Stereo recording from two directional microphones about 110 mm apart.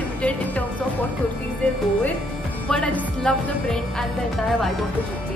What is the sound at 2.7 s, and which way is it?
Speech, 10° left (ahead or behind).